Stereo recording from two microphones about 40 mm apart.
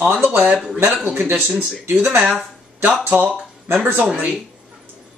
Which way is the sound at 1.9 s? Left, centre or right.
Right.